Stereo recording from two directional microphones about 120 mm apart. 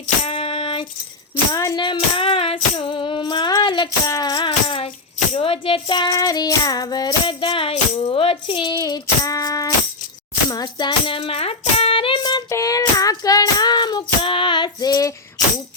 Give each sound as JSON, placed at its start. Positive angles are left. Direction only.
{"t": 0.3, "sound": "a sound", "side_deg": 50}
{"t": 1.5, "sound": "music", "side_deg": 35}
{"t": 5.3, "sound": "child singing", "side_deg": 50}
{"t": 8.8, "sound": "a sound", "side_deg": 30}
{"t": 10.5, "sound": "music", "side_deg": 35}
{"t": 12.5, "sound": "child singing", "side_deg": 25}